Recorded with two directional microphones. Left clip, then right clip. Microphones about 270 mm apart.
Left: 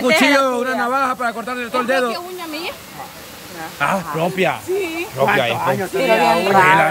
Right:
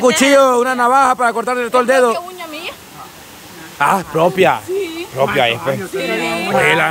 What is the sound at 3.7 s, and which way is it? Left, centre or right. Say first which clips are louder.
Speech: right 5 dB; centre.